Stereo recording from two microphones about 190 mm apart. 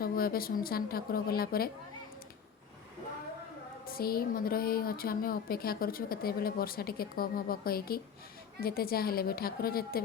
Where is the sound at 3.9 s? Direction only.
50° left (ahead or behind).